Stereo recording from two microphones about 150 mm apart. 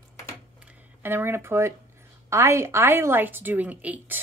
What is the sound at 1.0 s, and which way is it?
Speech, 15° right (ahead or behind).